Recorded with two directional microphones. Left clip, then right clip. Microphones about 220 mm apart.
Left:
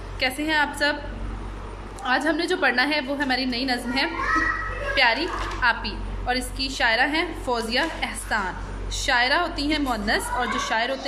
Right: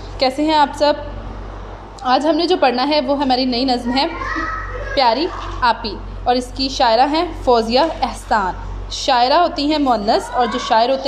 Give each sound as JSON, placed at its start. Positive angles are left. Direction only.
{"t": 0.2, "sound": "a woman's voice", "side_deg": -15}
{"t": 2.0, "sound": "a woman's voice", "side_deg": -10}